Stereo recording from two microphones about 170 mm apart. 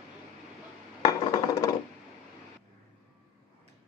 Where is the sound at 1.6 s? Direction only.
20° left (ahead or behind).